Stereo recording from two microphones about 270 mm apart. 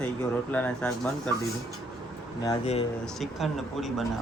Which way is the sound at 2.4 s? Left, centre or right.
Left.